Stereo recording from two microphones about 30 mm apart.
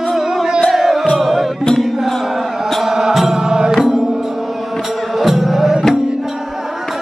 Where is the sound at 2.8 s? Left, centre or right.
Centre.